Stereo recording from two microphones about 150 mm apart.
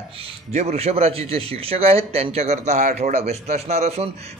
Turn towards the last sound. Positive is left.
turn(degrees=-45)  # may be behind; listen again after turning